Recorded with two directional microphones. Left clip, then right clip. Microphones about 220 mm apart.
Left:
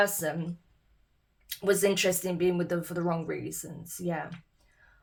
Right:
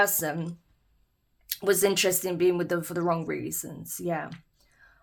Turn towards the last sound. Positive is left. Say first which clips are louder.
# right 3 dB
turn(degrees=-40)  # may be behind; listen again after turning